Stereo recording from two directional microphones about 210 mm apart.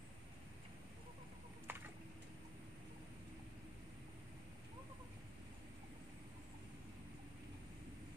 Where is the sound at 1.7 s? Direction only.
10° right (ahead or behind).